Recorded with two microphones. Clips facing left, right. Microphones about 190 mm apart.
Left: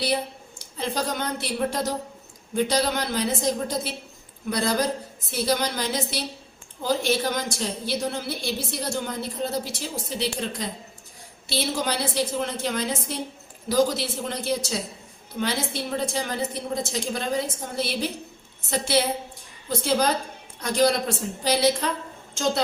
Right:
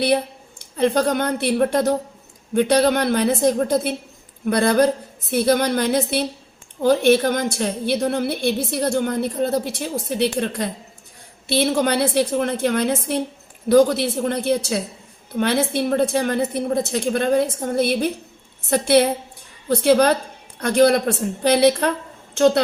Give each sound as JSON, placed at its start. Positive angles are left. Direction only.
{"t": 0.8, "sound": "a woman's voice", "side_deg": -60}